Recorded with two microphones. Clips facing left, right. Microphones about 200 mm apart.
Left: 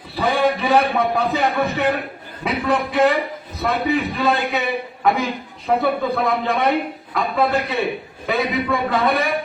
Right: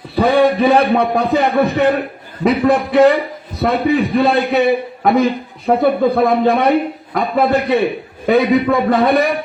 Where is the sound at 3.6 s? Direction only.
40° right (ahead or behind).